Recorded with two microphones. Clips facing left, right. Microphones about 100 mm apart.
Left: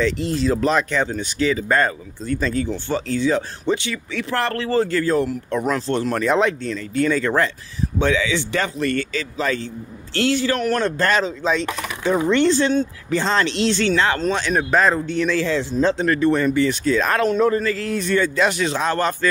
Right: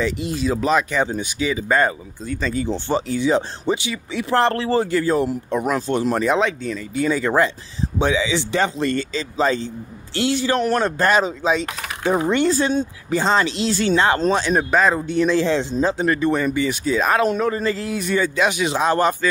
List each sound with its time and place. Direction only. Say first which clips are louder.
0.0 s speech: left 2 dB; 10° right (ahead or behind)
6.3 s speech: left 1 dB; 5° right (ahead or behind); by 15.8 s 25° right (ahead or behind)
15.8 s speech: left 4 dB; 10° right (ahead or behind)
17.6 s speech: even; 25° right (ahead or behind)
17.8 s speech: left 1 dB; 10° right (ahead or behind)